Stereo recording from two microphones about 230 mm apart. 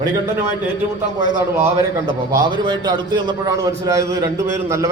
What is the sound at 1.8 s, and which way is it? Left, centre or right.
A man's voice, centre.